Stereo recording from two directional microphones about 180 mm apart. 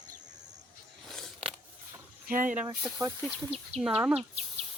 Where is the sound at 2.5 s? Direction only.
5° right (ahead or behind).